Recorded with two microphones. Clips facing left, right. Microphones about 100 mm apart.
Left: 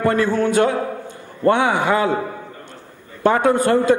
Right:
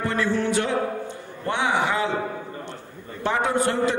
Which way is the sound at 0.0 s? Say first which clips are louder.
Left 6 dB; 50° left (ahead or behind).